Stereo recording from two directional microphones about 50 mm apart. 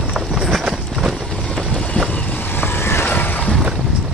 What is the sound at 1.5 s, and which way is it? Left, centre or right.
Vehicle, centre.